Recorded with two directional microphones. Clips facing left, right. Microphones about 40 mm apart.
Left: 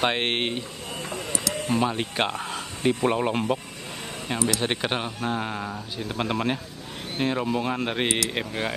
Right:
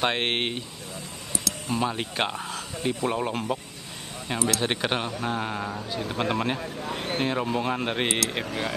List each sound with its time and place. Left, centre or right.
0.0 s speech: centre
1.8 s speech: centre
2.8 s speech: left
3.1 s speech: centre
4.3 s speech: centre